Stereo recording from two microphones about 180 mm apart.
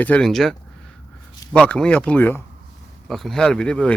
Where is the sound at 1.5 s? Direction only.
5° left (ahead or behind).